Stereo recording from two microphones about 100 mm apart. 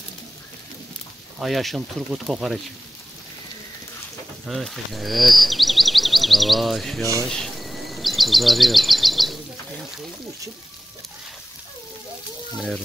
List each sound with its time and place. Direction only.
1.4 s speech: centre (ahead or behind)
4.5 s speech: centre (ahead or behind)
7.2 s bird: 5° left (ahead or behind)